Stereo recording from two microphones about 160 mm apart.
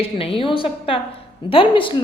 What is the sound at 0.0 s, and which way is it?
A woman's voice, 35° left (ahead or behind).